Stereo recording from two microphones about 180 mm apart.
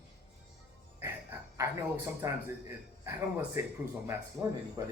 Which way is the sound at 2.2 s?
15° right (ahead or behind).